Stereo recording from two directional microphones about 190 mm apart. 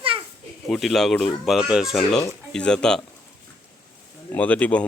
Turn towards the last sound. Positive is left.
turn(degrees=5)  # may be behind; listen again after turning